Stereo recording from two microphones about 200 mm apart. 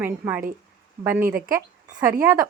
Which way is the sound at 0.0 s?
10° right (ahead or behind).